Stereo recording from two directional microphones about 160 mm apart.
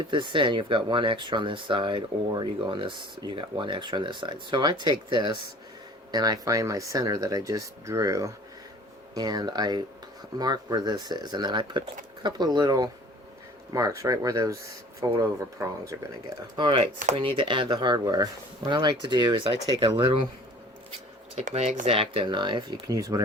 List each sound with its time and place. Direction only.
0.0 s speech: 30° right (ahead or behind)
16.6 s speech: 35° right (ahead or behind)
21.3 s speech: 40° right (ahead or behind); by 23.2 s 25° right (ahead or behind)